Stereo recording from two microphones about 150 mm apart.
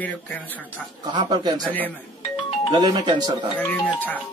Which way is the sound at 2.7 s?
25° right (ahead or behind).